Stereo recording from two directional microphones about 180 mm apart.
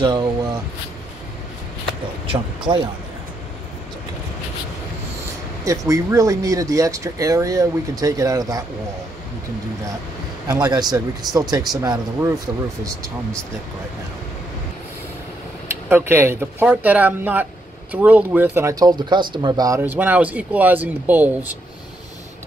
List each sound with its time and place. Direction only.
0.0 s a sound: 25° right (ahead or behind)
2.2 s speech: 25° right (ahead or behind)
5.7 s speech: 20° right (ahead or behind)
10.5 s speech: 20° right (ahead or behind)
15.9 s speech: 10° right (ahead or behind)